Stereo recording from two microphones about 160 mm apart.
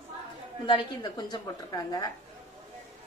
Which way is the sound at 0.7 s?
25° left (ahead or behind).